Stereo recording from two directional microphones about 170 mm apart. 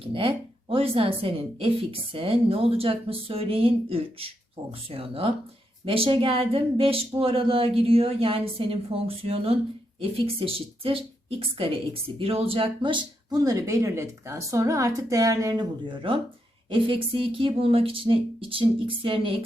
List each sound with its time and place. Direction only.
0.0 s a woman's voice: 30° right (ahead or behind)